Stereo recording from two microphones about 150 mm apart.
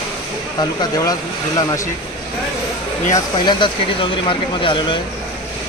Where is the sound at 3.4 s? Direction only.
30° left (ahead or behind).